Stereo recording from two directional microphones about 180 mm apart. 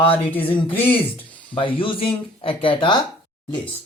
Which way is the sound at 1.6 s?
30° left (ahead or behind).